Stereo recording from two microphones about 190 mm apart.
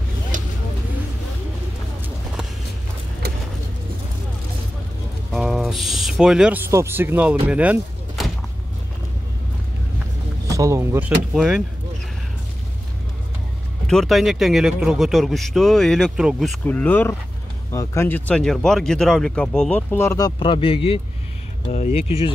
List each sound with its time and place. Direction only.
5.3 s speech: centre (ahead or behind)
7.4 s a sound: 5° right (ahead or behind)
10.5 s speech: 15° right (ahead or behind)
13.8 s speech: centre (ahead or behind); by 22.0 s 35° left (ahead or behind)